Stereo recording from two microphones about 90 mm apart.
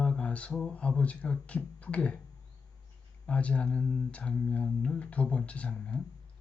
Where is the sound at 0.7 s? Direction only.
15° left (ahead or behind).